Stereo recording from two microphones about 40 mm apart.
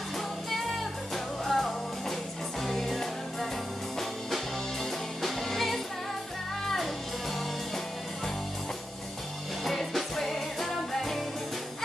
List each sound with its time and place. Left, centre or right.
1.1 s music: centre
5.2 s music: centre
9.7 s music: centre